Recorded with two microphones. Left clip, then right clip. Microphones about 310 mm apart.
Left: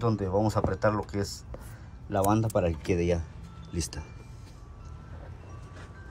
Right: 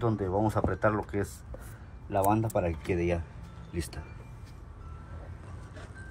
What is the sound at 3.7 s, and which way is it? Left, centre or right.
Speech, left.